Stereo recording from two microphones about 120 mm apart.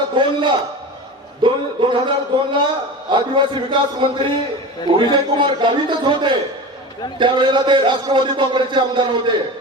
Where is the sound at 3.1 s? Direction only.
40° right (ahead or behind).